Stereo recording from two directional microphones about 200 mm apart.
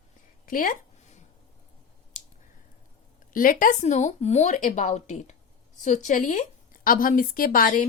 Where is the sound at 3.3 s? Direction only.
45° left (ahead or behind).